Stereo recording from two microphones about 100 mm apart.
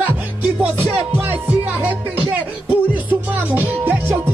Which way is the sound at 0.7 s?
20° right (ahead or behind).